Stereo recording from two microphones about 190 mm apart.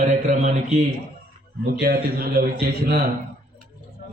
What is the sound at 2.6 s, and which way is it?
Speech, 55° right (ahead or behind).